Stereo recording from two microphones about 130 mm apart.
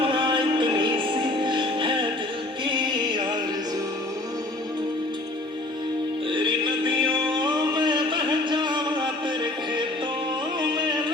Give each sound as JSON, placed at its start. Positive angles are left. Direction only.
{"t": 0.0, "sound": "music", "side_deg": -40}
{"t": 6.3, "sound": "music", "side_deg": -40}